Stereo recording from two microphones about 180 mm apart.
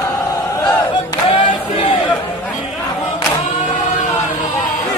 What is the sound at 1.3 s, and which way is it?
Choir, 30° left (ahead or behind).